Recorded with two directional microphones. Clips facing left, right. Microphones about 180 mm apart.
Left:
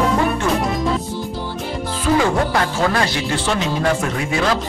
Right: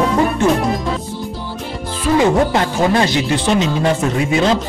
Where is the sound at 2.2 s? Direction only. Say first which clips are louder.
Right 7 dB; 20° right (ahead or behind).